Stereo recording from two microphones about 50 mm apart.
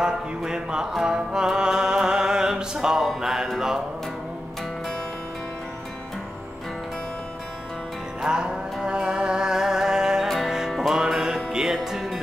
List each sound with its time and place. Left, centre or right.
0.0 s speech: centre
1.0 s music: centre
3.2 s speech: centre
8.2 s music: centre
10.2 s music: centre